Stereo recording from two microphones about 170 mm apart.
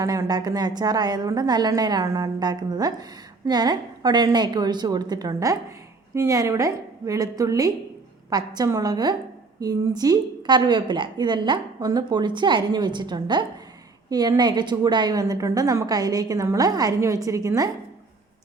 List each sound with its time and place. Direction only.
0.0 s a woman's voice: 20° right (ahead or behind)